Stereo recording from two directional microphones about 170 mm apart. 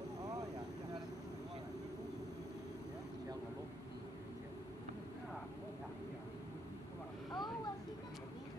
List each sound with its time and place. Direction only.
0.2 s vehicle: 20° right (ahead or behind)
7.3 s vehicle: 25° left (ahead or behind)